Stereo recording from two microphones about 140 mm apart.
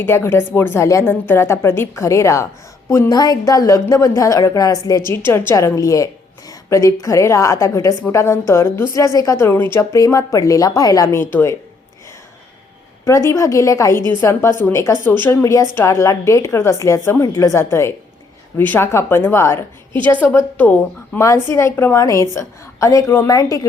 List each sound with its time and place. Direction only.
0.0 s a woman's voice: 15° left (ahead or behind)
13.1 s a woman's voice: 20° left (ahead or behind)